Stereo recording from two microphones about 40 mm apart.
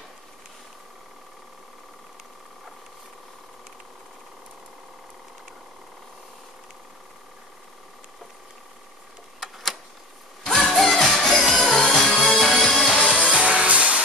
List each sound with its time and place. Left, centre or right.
9.4 s a sound: centre
10.4 s music: centre
13.1 s music: right